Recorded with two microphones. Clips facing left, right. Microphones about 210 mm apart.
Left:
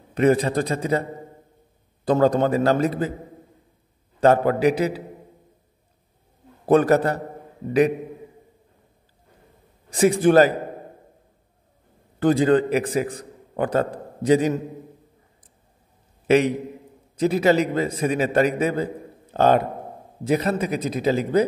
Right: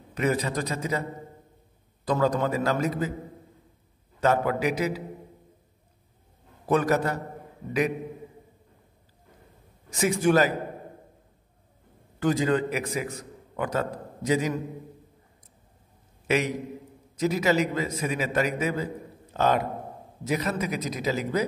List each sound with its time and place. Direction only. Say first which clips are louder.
0.1 s a man's voice: left 8 dB; 30° left (ahead or behind)
2.2 s a man's voice: left 6 dB; 30° left (ahead or behind)
4.2 s a man's voice: left 7 dB; 35° left (ahead or behind)
6.6 s a man's voice: left 7 dB; 35° left (ahead or behind)
9.8 s a man's voice: left 6 dB; 35° left (ahead or behind)
12.2 s a man's voice: left 6 dB; 30° left (ahead or behind)
16.3 s a man's voice: left 8 dB; 30° left (ahead or behind)